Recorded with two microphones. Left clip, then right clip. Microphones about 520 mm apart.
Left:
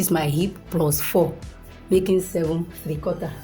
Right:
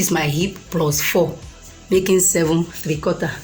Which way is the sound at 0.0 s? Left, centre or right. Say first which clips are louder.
Right 3 dB; left.